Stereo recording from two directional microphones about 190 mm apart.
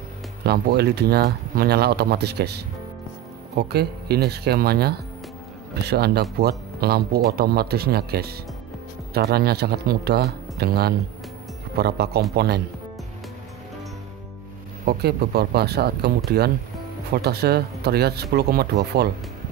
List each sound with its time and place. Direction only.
0.4 s speech: 60° right (ahead or behind)
14.9 s speech: 60° right (ahead or behind)